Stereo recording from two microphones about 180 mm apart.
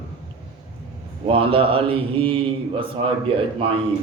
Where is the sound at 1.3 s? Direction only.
30° right (ahead or behind).